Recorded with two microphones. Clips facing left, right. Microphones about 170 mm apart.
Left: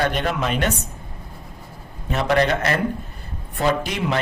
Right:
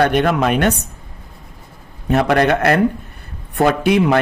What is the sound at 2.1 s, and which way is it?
Speech, 55° right (ahead or behind).